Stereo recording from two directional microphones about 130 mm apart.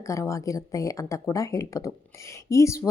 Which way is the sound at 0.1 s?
25° left (ahead or behind).